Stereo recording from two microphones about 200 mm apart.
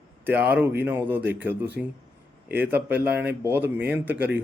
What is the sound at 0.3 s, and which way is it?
A man's voice, 10° right (ahead or behind).